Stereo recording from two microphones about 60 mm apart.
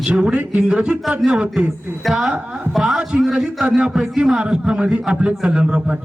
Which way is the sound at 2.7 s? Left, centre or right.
Centre.